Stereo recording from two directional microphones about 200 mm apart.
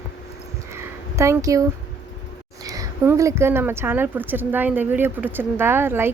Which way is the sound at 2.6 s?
15° right (ahead or behind).